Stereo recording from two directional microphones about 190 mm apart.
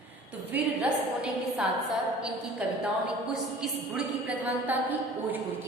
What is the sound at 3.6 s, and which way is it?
A woman's voice, 5° right (ahead or behind).